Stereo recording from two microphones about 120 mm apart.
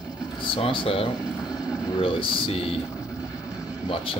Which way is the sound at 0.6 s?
50° left (ahead or behind).